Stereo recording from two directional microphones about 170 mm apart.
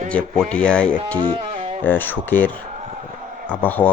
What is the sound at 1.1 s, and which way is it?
Music, 30° right (ahead or behind).